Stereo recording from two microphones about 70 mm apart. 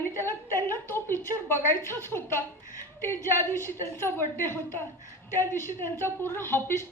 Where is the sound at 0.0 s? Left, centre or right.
Left.